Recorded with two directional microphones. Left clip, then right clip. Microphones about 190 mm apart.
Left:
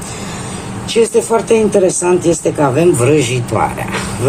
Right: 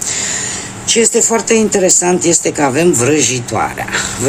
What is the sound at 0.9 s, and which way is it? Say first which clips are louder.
Speech: even; 35° right (ahead or behind).